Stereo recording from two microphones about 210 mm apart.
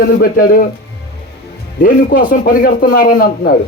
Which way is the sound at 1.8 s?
40° left (ahead or behind).